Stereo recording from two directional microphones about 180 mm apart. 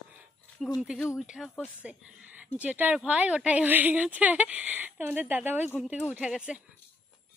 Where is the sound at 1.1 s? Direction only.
5° right (ahead or behind).